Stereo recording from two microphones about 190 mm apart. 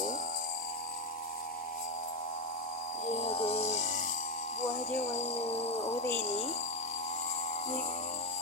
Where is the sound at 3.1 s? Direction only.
35° left (ahead or behind).